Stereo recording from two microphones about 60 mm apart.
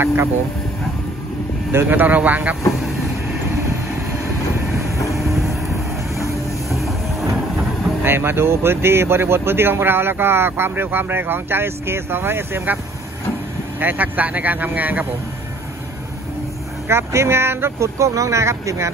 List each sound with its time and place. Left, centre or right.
0.0 s speech: right
1.7 s speech: right
6.7 s music: centre
8.0 s speech: right
13.7 s speech: right
16.8 s speech: right